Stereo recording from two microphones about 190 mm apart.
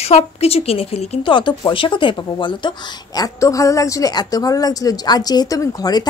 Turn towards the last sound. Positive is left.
turn(degrees=20)  # may be behind; listen again after turning